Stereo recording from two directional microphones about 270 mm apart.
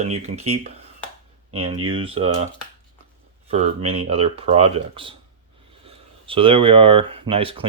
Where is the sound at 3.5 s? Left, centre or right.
Right.